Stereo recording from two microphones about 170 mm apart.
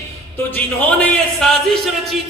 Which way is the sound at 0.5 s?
10° left (ahead or behind).